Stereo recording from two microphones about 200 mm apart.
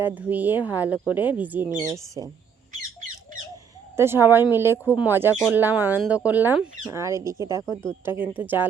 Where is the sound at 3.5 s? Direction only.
10° right (ahead or behind).